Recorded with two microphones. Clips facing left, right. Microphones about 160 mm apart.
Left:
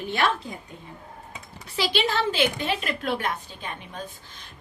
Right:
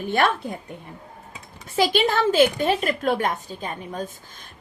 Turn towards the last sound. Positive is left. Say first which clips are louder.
# right 6 dB
turn(degrees=-45)  # may be behind; listen again after turning